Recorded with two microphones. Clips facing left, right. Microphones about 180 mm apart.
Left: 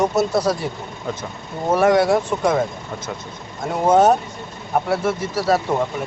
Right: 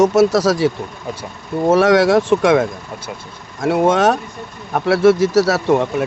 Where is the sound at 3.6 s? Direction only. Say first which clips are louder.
Right 1 dB; 90° right.